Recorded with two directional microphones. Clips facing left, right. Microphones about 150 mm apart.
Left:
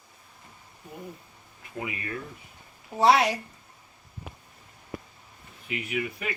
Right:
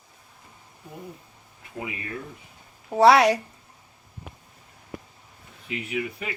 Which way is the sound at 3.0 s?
75° right (ahead or behind).